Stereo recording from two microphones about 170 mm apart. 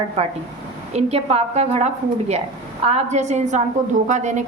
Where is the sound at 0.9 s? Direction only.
40° right (ahead or behind).